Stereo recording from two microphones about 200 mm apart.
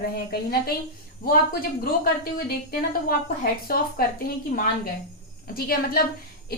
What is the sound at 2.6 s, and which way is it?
A woman's voice, 50° left (ahead or behind).